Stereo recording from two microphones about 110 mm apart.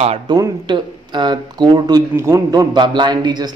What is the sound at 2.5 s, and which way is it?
Speech, 40° right (ahead or behind).